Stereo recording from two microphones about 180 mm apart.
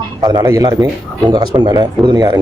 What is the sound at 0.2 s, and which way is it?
A man's voice, 20° right (ahead or behind).